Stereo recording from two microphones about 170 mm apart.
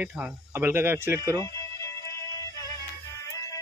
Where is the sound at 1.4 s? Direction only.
20° left (ahead or behind).